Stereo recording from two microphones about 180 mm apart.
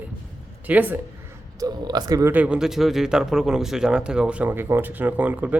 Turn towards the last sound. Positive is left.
turn(degrees=-10)  # may be behind; listen again after turning